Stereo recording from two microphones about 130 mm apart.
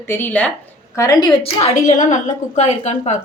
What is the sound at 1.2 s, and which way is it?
Speech, 35° left (ahead or behind).